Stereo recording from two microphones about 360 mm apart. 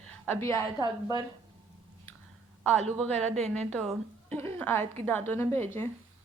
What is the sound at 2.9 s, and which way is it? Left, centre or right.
A woman's voice, centre.